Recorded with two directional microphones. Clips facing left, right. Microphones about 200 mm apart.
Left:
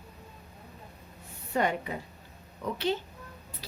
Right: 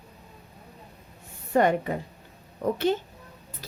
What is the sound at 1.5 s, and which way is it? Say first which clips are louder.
A woman's voice: right 7 dB; 50° right (ahead or behind).